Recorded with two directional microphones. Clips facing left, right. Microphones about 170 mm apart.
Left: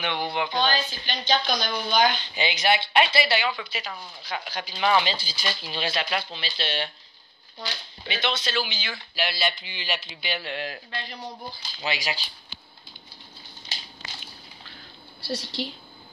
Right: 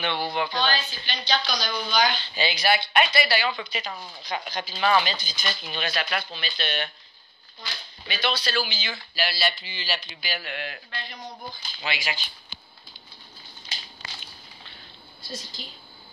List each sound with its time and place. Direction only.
0.0 s speech: 15° left (ahead or behind)
0.7 s a woman's voice: 45° left (ahead or behind)
2.3 s speech: 20° left (ahead or behind)
3.4 s speech: 5° left (ahead or behind)
5.0 s speech: 30° left (ahead or behind)
15.1 s a woman's voice: 70° left (ahead or behind)